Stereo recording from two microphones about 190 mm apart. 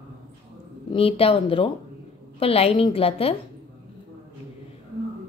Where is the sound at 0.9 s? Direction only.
30° left (ahead or behind).